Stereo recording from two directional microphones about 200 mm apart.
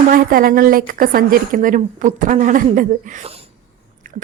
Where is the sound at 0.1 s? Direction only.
45° right (ahead or behind).